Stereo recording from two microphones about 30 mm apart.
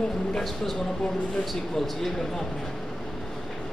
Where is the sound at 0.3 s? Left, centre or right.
Centre.